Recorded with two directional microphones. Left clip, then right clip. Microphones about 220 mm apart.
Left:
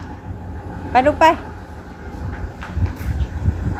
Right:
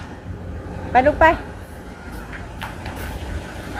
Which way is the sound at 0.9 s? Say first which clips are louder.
Left 1 dB; 5° left (ahead or behind).